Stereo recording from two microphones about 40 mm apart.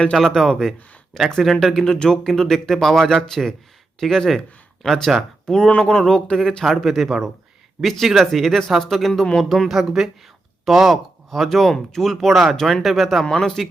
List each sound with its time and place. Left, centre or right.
0.1 s speech: centre
1.8 s speech: left
6.7 s speech: centre
9.5 s speech: centre
12.1 s speech: centre
13.2 s speech: centre